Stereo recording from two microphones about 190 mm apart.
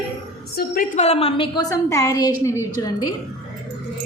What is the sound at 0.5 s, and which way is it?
Speech, 50° left (ahead or behind).